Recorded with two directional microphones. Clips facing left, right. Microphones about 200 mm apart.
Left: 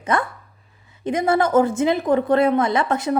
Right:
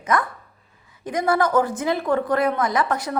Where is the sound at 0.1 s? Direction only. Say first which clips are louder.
Even; 30° left (ahead or behind).